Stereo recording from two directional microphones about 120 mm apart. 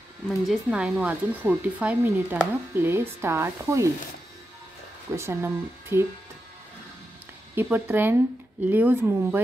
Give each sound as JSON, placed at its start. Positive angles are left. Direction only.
{"t": 0.3, "sound": "speech", "side_deg": 0}
{"t": 5.1, "sound": "speech", "side_deg": -20}
{"t": 7.5, "sound": "speech", "side_deg": -15}